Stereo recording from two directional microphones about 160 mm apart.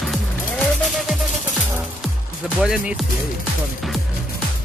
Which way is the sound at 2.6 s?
5° right (ahead or behind).